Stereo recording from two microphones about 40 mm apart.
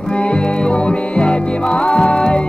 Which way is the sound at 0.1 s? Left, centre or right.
Left.